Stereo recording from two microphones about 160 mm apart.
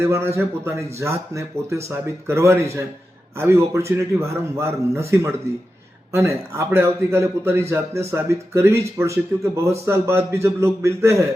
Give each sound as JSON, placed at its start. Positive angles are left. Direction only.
{"t": 0.0, "sound": "speech", "side_deg": -15}